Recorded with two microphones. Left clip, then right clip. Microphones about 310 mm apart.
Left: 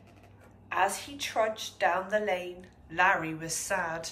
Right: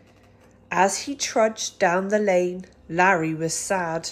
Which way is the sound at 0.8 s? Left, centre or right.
Centre.